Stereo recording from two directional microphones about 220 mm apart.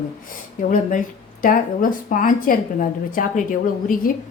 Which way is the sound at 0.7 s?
35° left (ahead or behind).